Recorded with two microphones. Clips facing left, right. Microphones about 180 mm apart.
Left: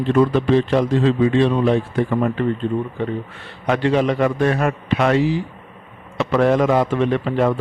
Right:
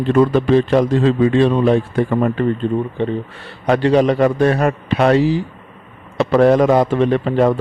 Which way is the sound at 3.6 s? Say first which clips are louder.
Right 4 dB; 35° right (ahead or behind).